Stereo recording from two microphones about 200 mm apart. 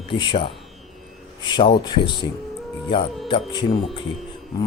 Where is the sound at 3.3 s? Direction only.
25° left (ahead or behind).